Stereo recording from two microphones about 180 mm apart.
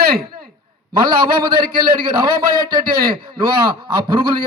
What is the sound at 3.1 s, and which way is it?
Speech, 30° right (ahead or behind).